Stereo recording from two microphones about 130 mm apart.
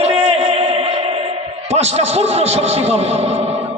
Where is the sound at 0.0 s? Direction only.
55° right (ahead or behind).